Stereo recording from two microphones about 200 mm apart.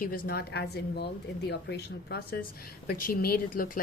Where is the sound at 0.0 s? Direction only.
50° left (ahead or behind).